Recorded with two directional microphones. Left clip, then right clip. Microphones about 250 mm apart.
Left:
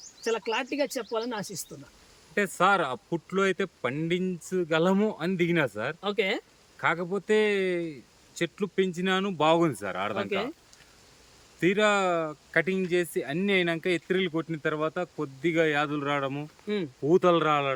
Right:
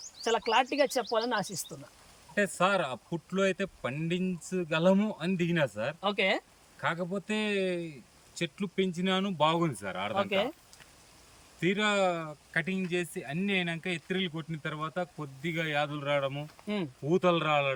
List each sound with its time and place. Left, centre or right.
0.3 s speech: centre
2.3 s speech: centre
6.0 s speech: centre
6.8 s speech: centre
10.2 s speech: centre
11.6 s speech: centre
16.6 s speech: centre
17.1 s speech: centre